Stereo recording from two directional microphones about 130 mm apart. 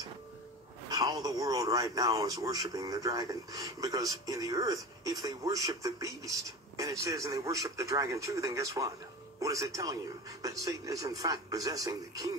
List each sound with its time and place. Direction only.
0.8 s a man's voice: 30° right (ahead or behind)